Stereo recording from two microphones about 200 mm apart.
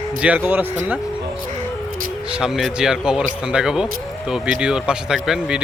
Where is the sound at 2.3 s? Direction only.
5° right (ahead or behind).